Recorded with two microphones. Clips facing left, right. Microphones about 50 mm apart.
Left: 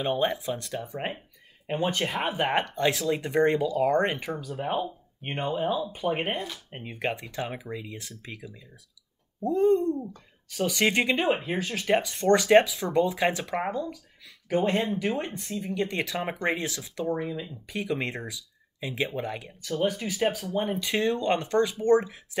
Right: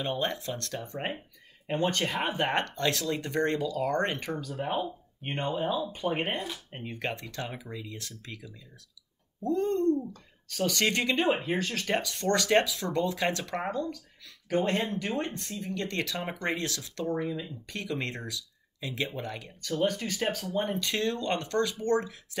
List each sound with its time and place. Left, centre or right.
0.0 s speech: centre
11.1 s speech: centre; by 22.4 s left